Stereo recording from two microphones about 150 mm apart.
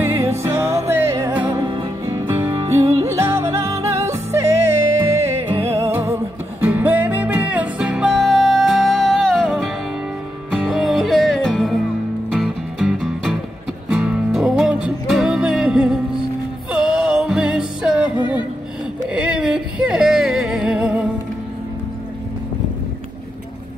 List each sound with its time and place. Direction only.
0.0 s music: 20° right (ahead or behind)
1.6 s music: 35° right (ahead or behind)
3.0 s yodeling: 20° right (ahead or behind)
4.9 s music: 15° right (ahead or behind)
19.1 s music: 5° right (ahead or behind)